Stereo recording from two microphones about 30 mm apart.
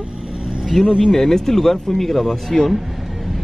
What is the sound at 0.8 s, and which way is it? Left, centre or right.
Speech, right.